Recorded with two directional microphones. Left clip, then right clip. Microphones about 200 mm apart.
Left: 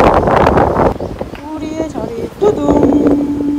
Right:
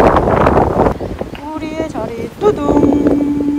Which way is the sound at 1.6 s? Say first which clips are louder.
Left 1 dB; 15° left (ahead or behind).